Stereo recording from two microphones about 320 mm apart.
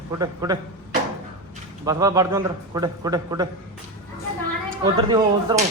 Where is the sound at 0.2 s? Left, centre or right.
Centre.